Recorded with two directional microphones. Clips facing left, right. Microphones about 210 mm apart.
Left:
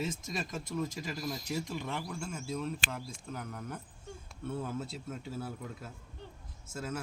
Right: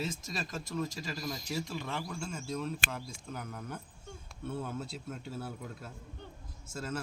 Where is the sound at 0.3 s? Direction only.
15° left (ahead or behind).